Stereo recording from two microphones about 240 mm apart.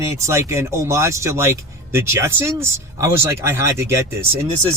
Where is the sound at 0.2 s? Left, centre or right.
Centre.